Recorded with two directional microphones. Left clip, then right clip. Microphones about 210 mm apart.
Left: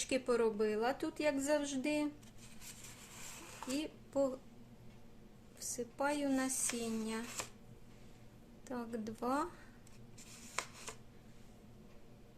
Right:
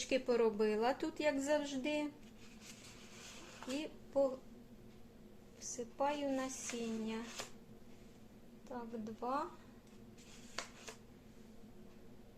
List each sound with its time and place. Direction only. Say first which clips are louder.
0.1 s a woman's voice: even; 10° left (ahead or behind)
3.7 s speech: left 1 dB; 15° left (ahead or behind)
5.7 s a woman's voice: left 1 dB; 20° left (ahead or behind)
8.7 s speech: left 3 dB; 30° left (ahead or behind)